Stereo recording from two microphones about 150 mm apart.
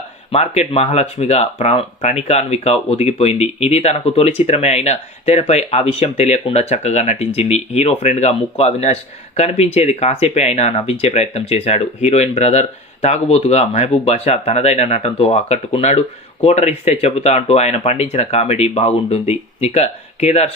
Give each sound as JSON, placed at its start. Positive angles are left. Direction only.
{"t": 0.3, "sound": "speech", "side_deg": 45}